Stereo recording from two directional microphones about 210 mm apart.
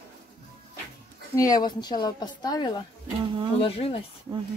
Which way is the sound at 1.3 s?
15° left (ahead or behind).